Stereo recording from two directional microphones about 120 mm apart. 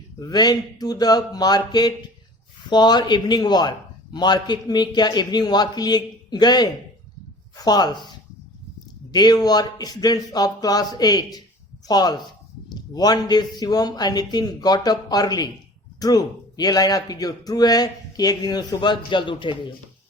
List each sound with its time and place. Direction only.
0.2 s a man's voice: 35° left (ahead or behind)
9.1 s a man's voice: 35° left (ahead or behind)